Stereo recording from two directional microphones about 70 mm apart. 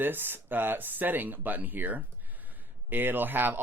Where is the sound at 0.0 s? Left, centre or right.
Right.